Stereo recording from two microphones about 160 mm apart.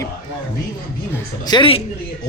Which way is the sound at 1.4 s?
30° left (ahead or behind).